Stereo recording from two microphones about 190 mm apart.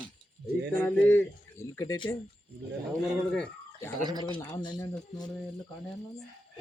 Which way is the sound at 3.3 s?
10° left (ahead or behind).